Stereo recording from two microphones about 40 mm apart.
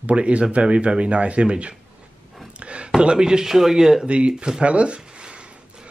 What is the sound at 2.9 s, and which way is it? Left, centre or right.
Speech, centre.